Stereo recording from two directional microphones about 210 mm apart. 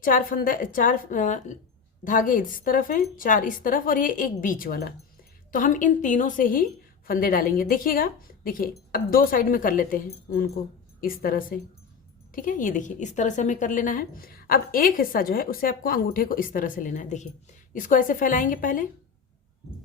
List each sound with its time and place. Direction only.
0.0 s a woman's voice: 40° left (ahead or behind)